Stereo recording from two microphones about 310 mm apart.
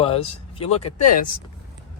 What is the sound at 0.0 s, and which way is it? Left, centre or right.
Speech, centre.